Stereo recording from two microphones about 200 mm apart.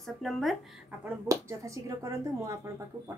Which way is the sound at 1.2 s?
15° right (ahead or behind).